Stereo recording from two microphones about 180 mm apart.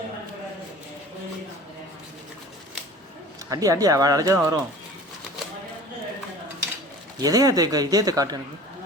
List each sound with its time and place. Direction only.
3.5 s speech: 20° right (ahead or behind)
7.2 s speech: 20° right (ahead or behind)